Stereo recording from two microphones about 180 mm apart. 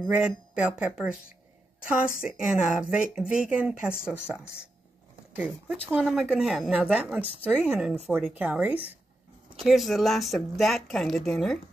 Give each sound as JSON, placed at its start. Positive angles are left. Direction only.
{"t": 0.0, "sound": "speech", "side_deg": -5}
{"t": 2.2, "sound": "speech", "side_deg": -5}
{"t": 5.3, "sound": "speech", "side_deg": -10}